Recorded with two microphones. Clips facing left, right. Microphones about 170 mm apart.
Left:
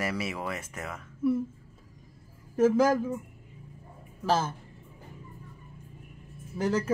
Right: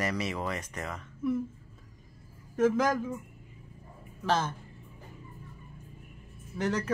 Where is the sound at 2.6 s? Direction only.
5° left (ahead or behind).